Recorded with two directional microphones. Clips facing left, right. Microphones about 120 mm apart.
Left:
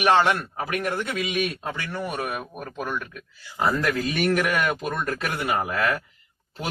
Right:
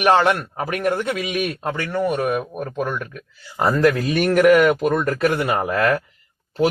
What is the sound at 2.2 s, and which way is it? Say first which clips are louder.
Speech: right 9 dB; 40° right (ahead or behind).